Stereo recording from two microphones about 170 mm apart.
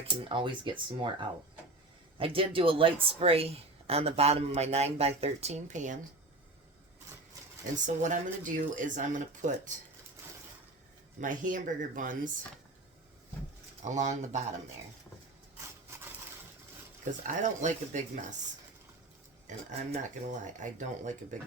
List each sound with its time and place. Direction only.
0.0 s speech: 30° right (ahead or behind); by 6.0 s 45° right (ahead or behind)
7.9 s speech: 50° right (ahead or behind)
11.2 s speech: 50° right (ahead or behind)
13.8 s speech: 45° right (ahead or behind)
17.2 s speech: 45° right (ahead or behind)
19.5 s speech: 45° right (ahead or behind)